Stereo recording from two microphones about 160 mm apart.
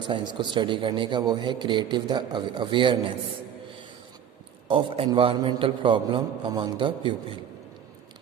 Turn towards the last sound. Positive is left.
turn(degrees=-30)  # may be behind; listen again after turning